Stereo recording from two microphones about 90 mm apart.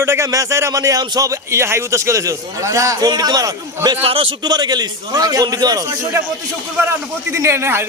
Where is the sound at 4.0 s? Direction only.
90° right.